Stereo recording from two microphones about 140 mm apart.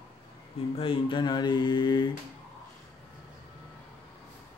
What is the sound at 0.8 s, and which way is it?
Speech, 35° left (ahead or behind).